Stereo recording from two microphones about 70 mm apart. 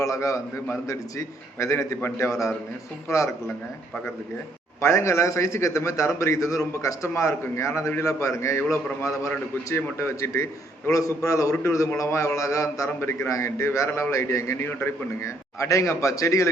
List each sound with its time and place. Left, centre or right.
0.0 s a man's voice: left
4.8 s a man's voice: left
10.0 s a man's voice: left
13.0 s a man's voice: left